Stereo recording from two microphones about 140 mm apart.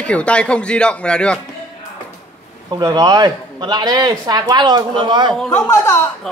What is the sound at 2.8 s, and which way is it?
Speech, 30° right (ahead or behind).